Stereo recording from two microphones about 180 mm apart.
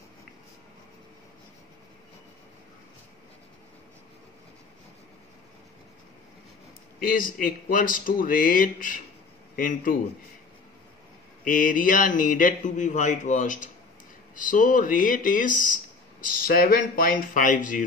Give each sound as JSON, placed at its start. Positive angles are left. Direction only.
{"t": 7.0, "sound": "speech", "side_deg": 50}
{"t": 11.4, "sound": "speech", "side_deg": 50}